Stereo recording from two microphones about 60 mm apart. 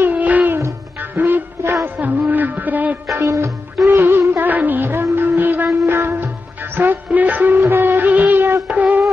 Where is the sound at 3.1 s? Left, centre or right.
Right.